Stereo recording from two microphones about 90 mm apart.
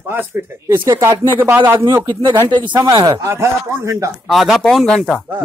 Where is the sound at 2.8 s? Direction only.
65° right (ahead or behind).